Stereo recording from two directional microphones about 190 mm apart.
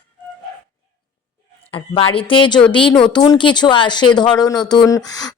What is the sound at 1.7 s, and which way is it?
Speech, 25° left (ahead or behind).